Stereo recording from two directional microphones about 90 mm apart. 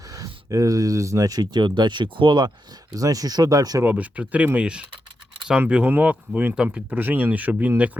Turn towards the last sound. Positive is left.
turn(degrees=-20)  # may be behind; listen again after turning